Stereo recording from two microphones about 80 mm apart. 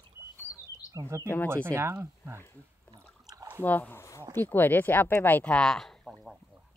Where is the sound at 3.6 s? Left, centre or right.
Left.